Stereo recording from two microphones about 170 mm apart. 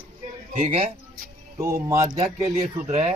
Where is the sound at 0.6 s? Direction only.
45° right (ahead or behind).